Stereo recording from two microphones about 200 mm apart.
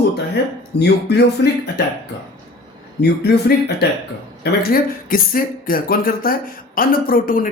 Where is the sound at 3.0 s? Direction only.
55° left (ahead or behind).